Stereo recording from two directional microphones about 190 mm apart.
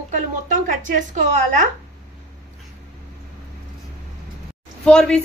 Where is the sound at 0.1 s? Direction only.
40° right (ahead or behind).